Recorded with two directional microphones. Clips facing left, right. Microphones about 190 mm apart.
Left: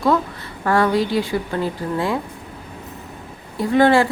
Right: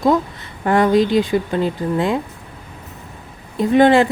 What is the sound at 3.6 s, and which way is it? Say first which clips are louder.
Speech: right 3 dB; 20° right (ahead or behind).